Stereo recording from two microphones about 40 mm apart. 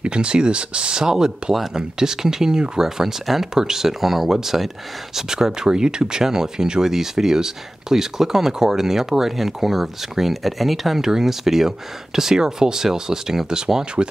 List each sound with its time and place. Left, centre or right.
0.0 s speech: right
3.0 s speech: centre